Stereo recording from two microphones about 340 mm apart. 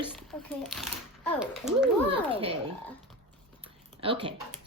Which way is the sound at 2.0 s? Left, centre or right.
Centre.